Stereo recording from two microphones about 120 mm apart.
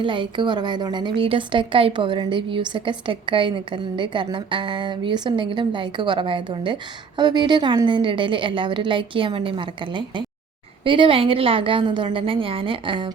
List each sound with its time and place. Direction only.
0.0 s a woman's voice: 45° right (ahead or behind)